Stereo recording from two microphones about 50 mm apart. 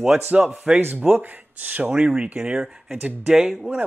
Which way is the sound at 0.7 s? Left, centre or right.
Right.